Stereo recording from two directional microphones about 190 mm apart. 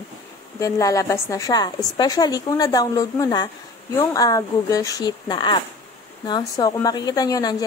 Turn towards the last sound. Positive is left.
turn(degrees=20)  # may be behind; listen again after turning